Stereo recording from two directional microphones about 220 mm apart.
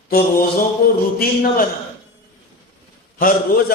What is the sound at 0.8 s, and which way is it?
Speech, 40° left (ahead or behind).